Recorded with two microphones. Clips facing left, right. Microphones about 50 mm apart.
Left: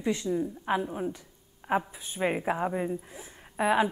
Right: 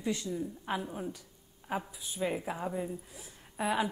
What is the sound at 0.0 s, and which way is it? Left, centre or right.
A woman's voice, left.